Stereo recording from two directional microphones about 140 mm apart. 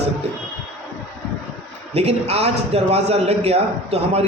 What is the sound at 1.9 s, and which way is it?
A man's voice, 45° right (ahead or behind).